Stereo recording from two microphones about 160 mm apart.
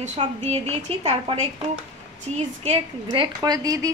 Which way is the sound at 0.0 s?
40° right (ahead or behind).